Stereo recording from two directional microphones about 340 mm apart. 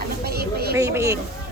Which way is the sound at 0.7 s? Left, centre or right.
Centre.